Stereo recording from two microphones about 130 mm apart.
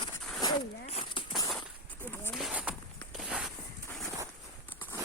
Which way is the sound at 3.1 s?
5° right (ahead or behind).